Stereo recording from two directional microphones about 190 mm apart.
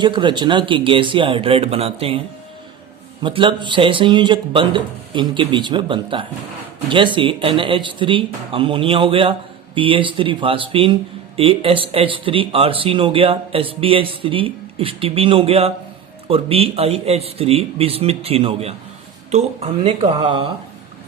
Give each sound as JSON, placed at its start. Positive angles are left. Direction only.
{"t": 0.0, "sound": "speech", "side_deg": -25}
{"t": 3.2, "sound": "speech", "side_deg": -25}